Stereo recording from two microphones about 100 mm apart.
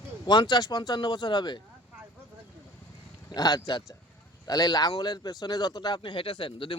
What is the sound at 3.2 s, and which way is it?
Speech, 40° left (ahead or behind).